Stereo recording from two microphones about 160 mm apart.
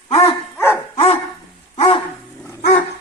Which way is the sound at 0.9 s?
40° left (ahead or behind).